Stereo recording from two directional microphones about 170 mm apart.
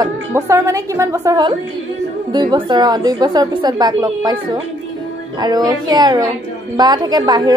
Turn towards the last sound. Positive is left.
turn(degrees=-25)  # may be behind; listen again after turning